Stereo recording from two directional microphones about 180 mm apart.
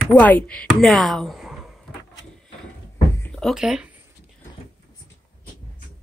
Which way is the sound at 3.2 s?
Centre (ahead or behind).